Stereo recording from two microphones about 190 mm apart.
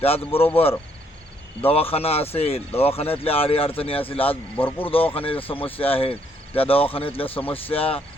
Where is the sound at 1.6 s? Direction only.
30° left (ahead or behind).